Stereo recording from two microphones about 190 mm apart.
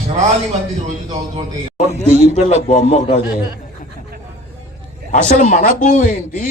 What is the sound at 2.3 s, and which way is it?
Speech, 40° left (ahead or behind).